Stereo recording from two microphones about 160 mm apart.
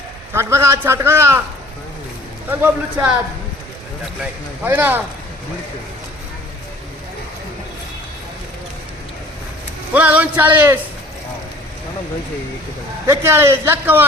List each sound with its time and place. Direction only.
0.3 s a man's voice: 15° right (ahead or behind)
2.5 s a man's voice: 10° right (ahead or behind)
4.2 s a man's voice: 10° right (ahead or behind)
9.9 s a man's voice: 10° right (ahead or behind)
13.1 s a man's voice: 15° right (ahead or behind)